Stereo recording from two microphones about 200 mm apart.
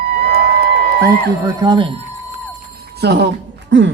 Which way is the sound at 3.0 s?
55° right (ahead or behind).